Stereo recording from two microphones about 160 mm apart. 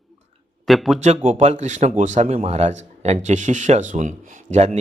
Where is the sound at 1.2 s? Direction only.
45° right (ahead or behind).